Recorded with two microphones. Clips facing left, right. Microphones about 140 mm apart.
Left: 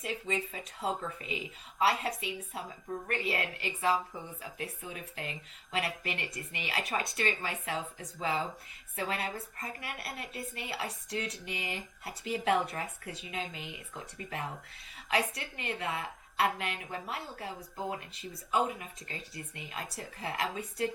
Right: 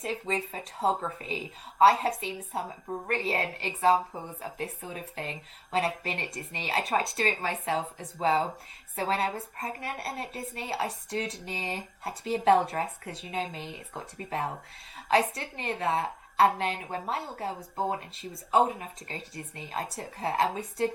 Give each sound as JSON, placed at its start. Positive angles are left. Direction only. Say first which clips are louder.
{"t": 0.0, "sound": "speech", "louder": "right 3 dB", "side_deg": -30}